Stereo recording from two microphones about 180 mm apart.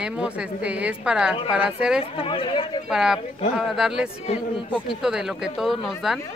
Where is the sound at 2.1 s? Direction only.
30° left (ahead or behind).